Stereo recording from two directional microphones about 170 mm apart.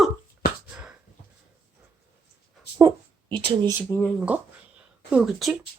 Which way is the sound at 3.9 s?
15° left (ahead or behind).